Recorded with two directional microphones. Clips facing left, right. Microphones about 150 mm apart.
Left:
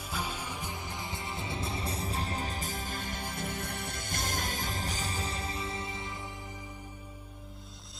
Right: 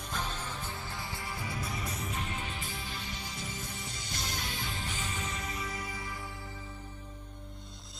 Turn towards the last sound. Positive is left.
turn(degrees=0)  # may be behind; listen again after turning